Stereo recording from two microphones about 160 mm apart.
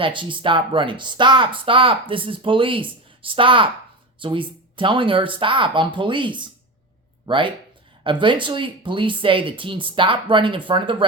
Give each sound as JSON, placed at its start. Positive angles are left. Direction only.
{"t": 0.0, "sound": "speech", "side_deg": -30}